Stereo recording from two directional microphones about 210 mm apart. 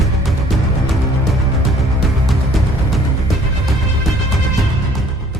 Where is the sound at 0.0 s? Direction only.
Centre (ahead or behind).